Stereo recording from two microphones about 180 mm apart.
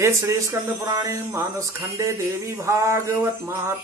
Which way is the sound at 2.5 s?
15° right (ahead or behind).